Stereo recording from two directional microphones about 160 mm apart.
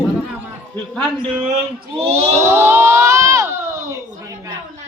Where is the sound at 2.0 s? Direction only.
40° right (ahead or behind).